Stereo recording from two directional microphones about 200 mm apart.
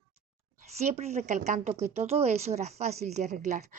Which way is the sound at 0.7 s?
35° right (ahead or behind).